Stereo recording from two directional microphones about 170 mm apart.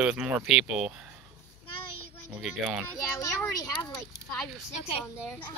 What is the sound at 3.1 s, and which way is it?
Speech, 20° left (ahead or behind).